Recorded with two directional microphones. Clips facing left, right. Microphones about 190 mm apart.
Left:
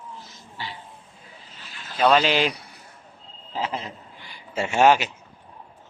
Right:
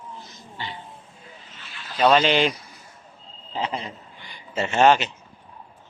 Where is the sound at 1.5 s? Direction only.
45° left (ahead or behind).